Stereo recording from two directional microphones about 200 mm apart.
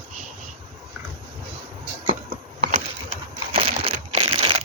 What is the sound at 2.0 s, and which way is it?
Shuffle, 40° right (ahead or behind).